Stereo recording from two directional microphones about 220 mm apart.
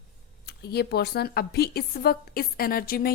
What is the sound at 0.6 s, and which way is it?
Speech, 45° left (ahead or behind).